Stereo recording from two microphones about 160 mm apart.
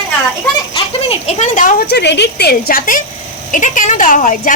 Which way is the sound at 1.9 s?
90° left.